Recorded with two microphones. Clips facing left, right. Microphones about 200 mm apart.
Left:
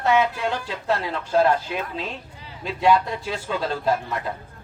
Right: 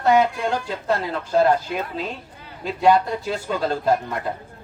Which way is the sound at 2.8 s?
45° right (ahead or behind).